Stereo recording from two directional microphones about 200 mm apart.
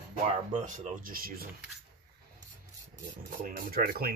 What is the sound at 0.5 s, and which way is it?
Speech, 40° right (ahead or behind).